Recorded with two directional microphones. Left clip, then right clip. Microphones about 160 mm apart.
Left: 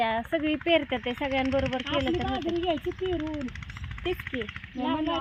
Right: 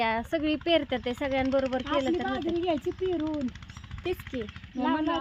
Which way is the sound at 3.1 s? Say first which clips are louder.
Right 2 dB; 90° right.